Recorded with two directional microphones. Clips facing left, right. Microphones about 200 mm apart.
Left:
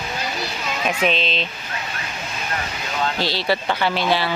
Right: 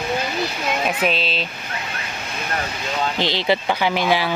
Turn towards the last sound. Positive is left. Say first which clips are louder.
# right 1 dB
turn(degrees=-15)  # may be behind; listen again after turning